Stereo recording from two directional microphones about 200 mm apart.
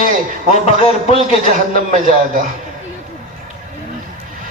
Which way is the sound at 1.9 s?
40° right (ahead or behind).